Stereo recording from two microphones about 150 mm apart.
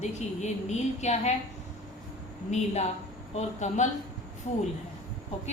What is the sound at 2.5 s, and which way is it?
A woman's voice, 50° left (ahead or behind).